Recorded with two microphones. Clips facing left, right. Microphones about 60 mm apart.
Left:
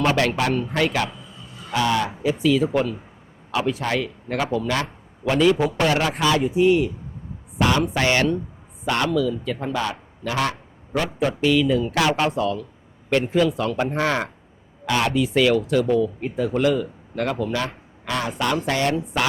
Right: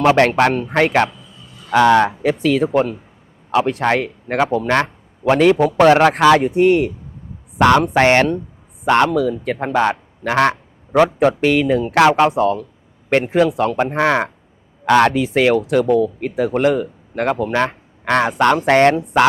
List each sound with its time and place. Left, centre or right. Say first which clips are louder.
0.2 s a man's voice: right 7 dB; right
3.7 s a man's voice: right 6 dB; right
7.9 s a man's voice: right 7 dB; right
10.9 s speech: right 10 dB; right
13.9 s speech: right 6 dB; right
14.8 s speech: right 8 dB; right
15.4 s a man's voice: right 4 dB; right